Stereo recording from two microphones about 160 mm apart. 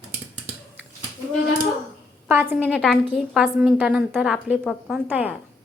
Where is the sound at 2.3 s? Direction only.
10° right (ahead or behind).